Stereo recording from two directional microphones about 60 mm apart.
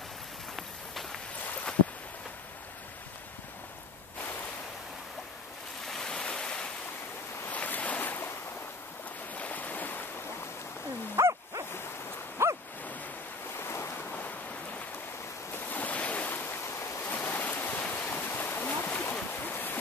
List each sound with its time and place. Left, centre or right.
5.9 s waves: centre
7.4 s ocean: left
9.3 s waves: left
11.2 s bow-wow: right
12.4 s bow-wow: right
13.6 s waves: left
15.7 s waves: left
17.0 s stream: left
18.7 s a sound: left
19.4 s waves: left